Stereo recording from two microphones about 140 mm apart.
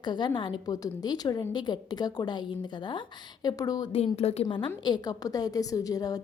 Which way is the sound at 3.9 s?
50° left (ahead or behind).